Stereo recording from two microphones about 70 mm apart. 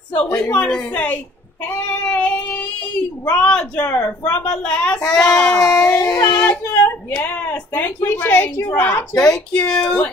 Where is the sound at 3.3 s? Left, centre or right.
Centre.